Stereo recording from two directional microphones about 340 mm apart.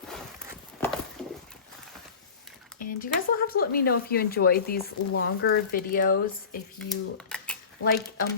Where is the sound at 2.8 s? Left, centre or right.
Left.